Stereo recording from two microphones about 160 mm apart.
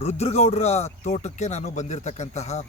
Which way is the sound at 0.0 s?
40° left (ahead or behind).